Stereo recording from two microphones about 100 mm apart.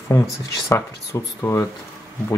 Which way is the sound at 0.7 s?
30° left (ahead or behind).